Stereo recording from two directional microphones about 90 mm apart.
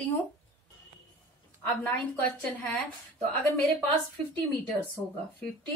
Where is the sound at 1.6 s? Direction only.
15° left (ahead or behind).